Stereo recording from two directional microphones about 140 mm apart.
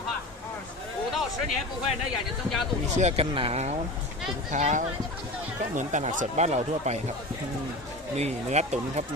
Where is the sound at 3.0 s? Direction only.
50° right (ahead or behind).